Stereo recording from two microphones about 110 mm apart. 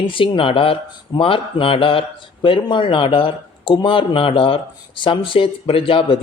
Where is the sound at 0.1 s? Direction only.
55° left (ahead or behind).